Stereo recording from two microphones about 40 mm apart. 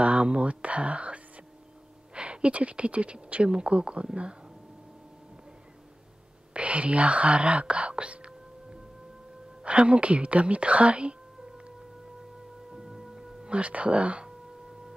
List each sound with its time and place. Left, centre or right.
0.0 s whispering: right
2.1 s speech: right
6.5 s speech: right
12.7 s a sound: centre
13.5 s speech: right